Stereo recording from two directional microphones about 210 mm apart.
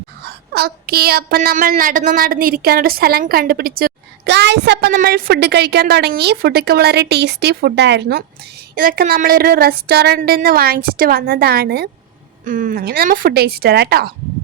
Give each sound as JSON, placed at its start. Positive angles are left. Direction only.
{"t": 0.3, "sound": "child singing", "side_deg": -50}
{"t": 8.7, "sound": "child singing", "side_deg": -45}